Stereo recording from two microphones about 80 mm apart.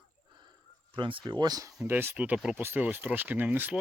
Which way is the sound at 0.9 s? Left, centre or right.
Right.